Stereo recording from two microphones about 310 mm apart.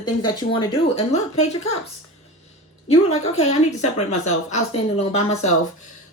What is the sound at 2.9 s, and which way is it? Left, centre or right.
A woman's voice, left.